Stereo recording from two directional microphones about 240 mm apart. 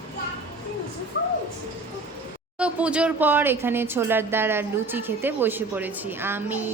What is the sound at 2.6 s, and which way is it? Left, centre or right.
A woman's voice, centre.